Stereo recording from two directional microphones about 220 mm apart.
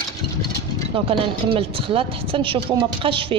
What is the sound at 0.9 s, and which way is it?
A woman's voice, 25° right (ahead or behind).